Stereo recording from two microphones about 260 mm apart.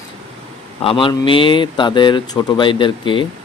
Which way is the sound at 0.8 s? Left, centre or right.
Centre.